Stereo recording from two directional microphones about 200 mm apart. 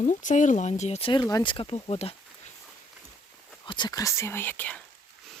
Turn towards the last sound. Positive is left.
turn(degrees=5)  # may be behind; listen again after turning